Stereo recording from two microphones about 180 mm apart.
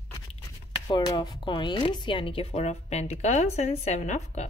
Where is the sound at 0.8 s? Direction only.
20° left (ahead or behind); by 4.4 s 40° left (ahead or behind).